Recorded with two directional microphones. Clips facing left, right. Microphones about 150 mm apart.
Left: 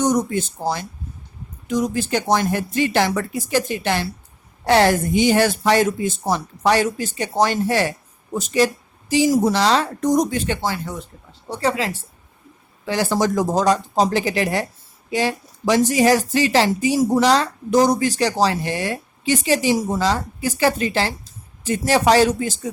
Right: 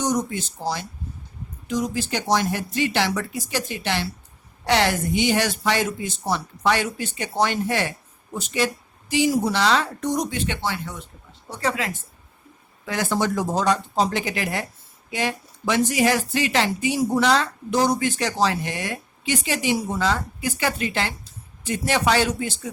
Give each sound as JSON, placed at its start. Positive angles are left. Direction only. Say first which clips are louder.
{"t": 0.0, "sound": "a woman's voice", "louder": "left 5 dB", "side_deg": 55}
{"t": 14.3, "sound": "speech", "louder": "left 6 dB", "side_deg": 25}